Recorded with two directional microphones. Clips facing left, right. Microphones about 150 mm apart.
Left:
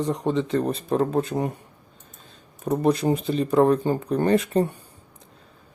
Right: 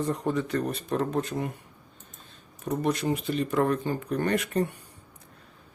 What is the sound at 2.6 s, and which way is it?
Speech, 35° left (ahead or behind).